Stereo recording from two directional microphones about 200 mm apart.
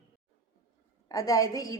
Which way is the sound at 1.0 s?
15° left (ahead or behind).